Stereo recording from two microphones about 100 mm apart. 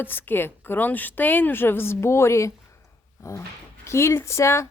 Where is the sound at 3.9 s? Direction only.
25° left (ahead or behind).